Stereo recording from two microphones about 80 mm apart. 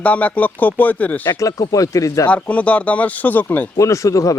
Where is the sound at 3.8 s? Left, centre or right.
Left.